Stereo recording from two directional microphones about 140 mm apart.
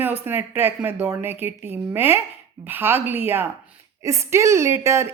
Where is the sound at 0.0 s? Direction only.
15° right (ahead or behind).